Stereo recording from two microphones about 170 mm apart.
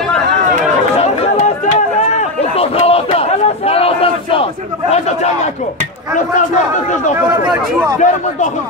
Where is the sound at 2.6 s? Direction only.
35° left (ahead or behind).